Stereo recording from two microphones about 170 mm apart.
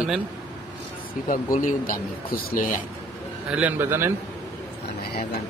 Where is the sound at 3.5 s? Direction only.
10° right (ahead or behind).